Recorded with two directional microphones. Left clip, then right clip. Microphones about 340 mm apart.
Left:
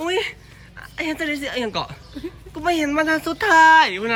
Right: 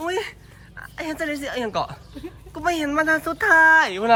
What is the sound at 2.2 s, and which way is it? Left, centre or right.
Speech, right.